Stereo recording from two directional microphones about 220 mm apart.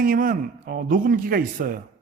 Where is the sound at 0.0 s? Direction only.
40° right (ahead or behind).